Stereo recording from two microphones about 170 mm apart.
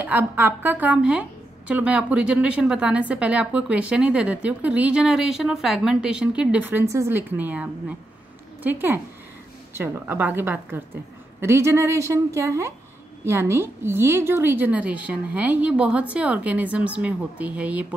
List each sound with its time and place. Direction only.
0.0 s a woman's voice: 10° right (ahead or behind)